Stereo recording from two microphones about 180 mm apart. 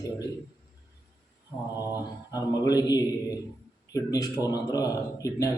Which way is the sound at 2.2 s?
20° left (ahead or behind).